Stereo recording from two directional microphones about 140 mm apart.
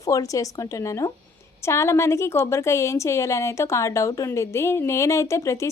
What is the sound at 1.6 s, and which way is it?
A woman's voice, 20° left (ahead or behind).